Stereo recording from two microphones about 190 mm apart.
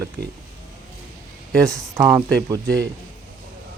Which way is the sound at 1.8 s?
15° right (ahead or behind).